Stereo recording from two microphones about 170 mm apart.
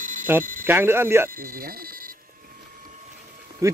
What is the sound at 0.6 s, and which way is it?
Speech, 10° right (ahead or behind).